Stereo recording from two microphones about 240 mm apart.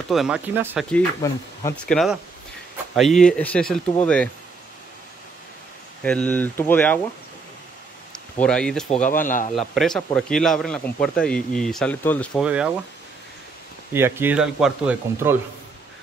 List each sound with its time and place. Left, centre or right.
0.1 s speech: centre
0.9 s speech: centre
1.9 s speech: centre
6.0 s speech: centre
8.4 s speech: centre
8.9 s speech: left
9.6 s speech: centre
12.4 s speech: centre
13.9 s speech: centre